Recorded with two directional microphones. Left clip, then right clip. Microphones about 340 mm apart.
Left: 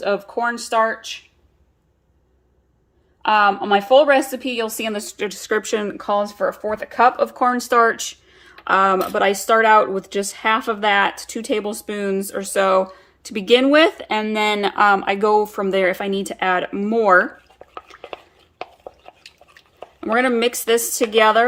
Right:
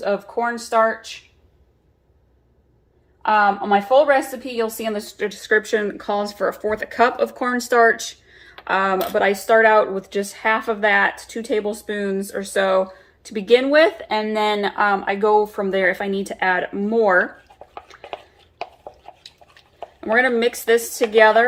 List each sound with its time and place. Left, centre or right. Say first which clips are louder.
0.0 s speech: left 1 dB; left
3.2 s speech: left 1 dB; left
6.3 s speech: even; left
6.9 s speech: left 3 dB; centre
16.4 s speech: even; left
16.7 s speech: left 2 dB; left
20.4 s a woman's voice: even; left